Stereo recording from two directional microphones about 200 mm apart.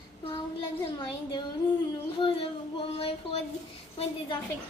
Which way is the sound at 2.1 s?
25° left (ahead or behind).